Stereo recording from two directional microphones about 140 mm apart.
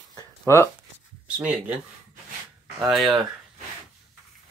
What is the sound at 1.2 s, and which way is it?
Speech, 10° right (ahead or behind).